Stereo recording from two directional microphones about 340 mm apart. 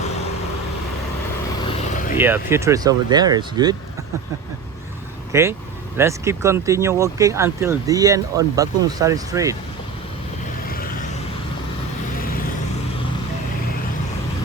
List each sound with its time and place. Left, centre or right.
1.6 s vehicle: left
2.1 s speech: centre
5.3 s speech: centre